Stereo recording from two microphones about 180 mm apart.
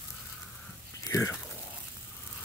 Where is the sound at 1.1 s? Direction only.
15° left (ahead or behind).